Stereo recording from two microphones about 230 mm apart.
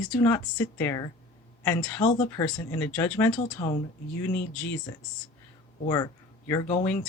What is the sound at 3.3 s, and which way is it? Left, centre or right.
Speech, centre.